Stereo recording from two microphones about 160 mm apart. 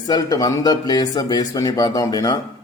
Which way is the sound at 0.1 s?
25° left (ahead or behind).